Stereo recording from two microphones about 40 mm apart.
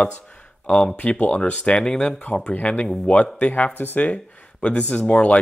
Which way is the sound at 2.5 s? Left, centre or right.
Left.